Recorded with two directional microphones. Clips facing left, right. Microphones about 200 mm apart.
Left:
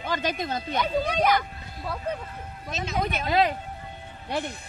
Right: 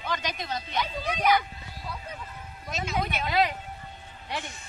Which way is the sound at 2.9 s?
40° left (ahead or behind).